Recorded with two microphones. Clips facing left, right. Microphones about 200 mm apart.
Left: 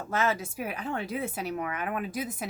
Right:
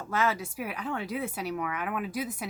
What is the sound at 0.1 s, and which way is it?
A woman's voice, 25° left (ahead or behind).